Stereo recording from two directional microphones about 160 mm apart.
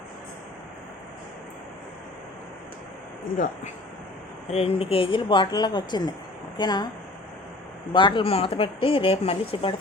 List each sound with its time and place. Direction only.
3.3 s speech: 55° left (ahead or behind)
4.5 s speech: 35° left (ahead or behind)
7.9 s speech: 30° left (ahead or behind)